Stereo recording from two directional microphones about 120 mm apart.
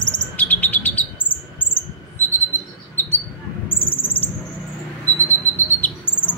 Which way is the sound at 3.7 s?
15° left (ahead or behind).